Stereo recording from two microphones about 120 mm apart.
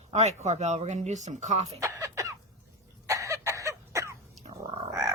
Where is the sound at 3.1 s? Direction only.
25° right (ahead or behind).